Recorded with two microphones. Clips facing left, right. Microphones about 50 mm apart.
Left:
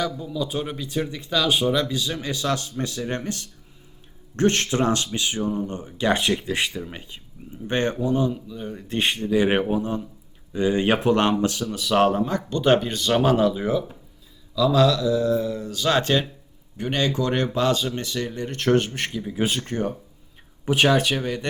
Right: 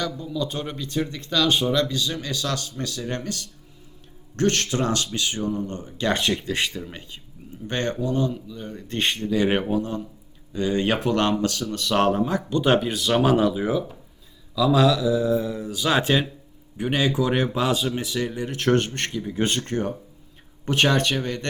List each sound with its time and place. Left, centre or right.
0.0 s speech: centre
11.6 s speech: centre